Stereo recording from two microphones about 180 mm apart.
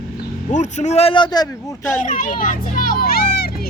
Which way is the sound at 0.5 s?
40° left (ahead or behind).